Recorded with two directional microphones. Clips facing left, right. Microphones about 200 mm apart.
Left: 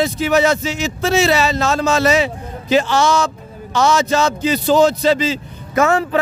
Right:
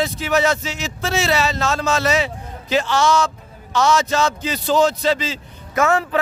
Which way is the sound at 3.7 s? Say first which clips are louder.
Left 2 dB; 5° left (ahead or behind).